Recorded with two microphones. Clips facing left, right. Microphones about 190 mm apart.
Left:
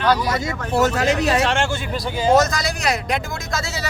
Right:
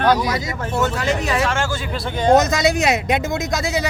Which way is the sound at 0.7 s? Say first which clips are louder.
Left 3 dB; 40° left (ahead or behind).